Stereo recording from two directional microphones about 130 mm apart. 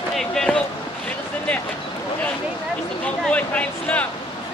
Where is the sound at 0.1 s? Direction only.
5° left (ahead or behind).